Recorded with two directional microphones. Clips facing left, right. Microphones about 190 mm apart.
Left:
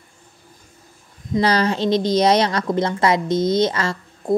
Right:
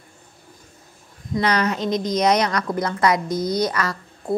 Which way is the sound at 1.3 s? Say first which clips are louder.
Left 3 dB; 30° left (ahead or behind).